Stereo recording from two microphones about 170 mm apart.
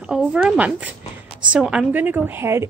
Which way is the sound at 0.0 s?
5° right (ahead or behind).